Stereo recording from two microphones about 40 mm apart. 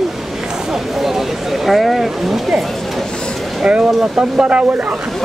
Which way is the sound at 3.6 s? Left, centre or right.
Right.